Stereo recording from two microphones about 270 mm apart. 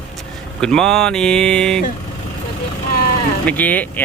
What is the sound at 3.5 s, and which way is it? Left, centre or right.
Speech, centre.